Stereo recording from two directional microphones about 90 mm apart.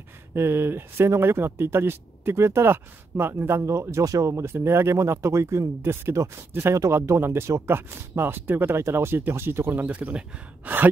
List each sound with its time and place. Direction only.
0.3 s speech: 25° right (ahead or behind)
9.8 s speech: 15° right (ahead or behind)